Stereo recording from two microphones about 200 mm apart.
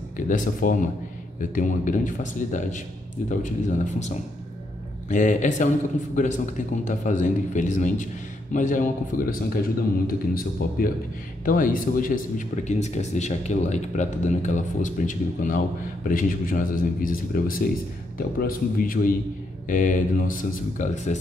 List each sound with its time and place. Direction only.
0.3 s speech: 40° left (ahead or behind)
5.1 s speech: 40° left (ahead or behind)